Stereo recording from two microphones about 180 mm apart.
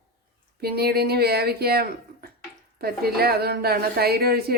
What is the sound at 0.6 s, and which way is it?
A woman's voice, 60° right (ahead or behind).